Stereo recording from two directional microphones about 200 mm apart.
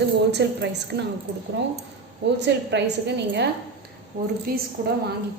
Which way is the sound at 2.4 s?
60° right (ahead or behind).